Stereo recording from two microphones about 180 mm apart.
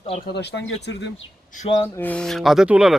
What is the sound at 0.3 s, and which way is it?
Speech, 65° left (ahead or behind).